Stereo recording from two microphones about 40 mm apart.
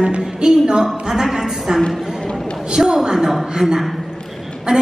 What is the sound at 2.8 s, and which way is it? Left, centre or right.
A woman's voice, centre.